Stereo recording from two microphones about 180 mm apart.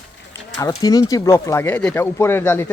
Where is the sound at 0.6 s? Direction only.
20° left (ahead or behind).